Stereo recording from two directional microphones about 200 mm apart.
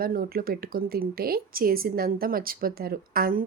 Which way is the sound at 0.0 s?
45° right (ahead or behind).